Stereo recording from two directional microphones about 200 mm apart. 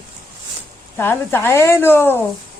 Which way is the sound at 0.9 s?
10° left (ahead or behind).